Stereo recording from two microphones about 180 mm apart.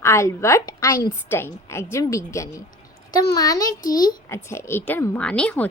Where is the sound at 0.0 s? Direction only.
15° left (ahead or behind).